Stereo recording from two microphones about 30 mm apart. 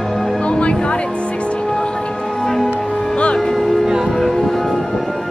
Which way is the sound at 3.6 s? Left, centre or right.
Centre.